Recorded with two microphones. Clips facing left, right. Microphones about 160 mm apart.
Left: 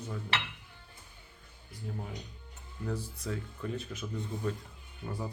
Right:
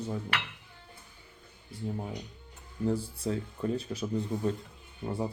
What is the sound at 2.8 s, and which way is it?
Speech, 30° right (ahead or behind).